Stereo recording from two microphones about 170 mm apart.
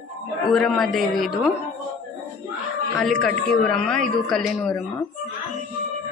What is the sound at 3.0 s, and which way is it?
Speech, 5° left (ahead or behind).